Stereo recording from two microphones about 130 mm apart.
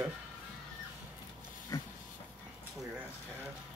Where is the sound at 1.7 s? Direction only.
30° left (ahead or behind).